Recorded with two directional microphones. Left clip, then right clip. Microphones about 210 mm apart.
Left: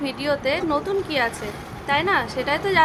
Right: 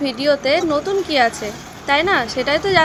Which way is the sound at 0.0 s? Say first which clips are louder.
Right 6 dB; 15° right (ahead or behind).